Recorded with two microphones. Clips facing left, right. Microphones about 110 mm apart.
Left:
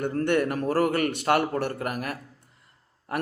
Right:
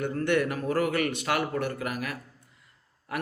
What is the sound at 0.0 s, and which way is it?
A man's voice, 45° left (ahead or behind).